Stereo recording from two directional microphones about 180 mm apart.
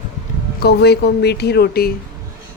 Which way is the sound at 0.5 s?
65° left (ahead or behind).